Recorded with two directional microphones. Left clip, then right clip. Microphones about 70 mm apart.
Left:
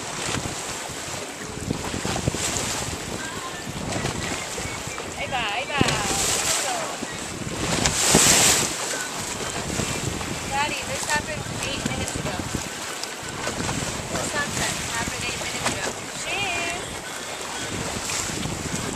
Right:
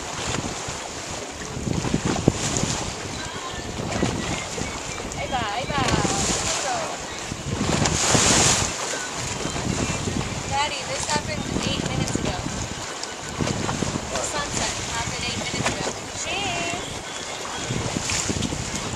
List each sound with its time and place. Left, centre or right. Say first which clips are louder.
5.3 s a sound: even; right
5.9 s boat: right 1 dB; centre
7.8 s waves: left 2 dB; centre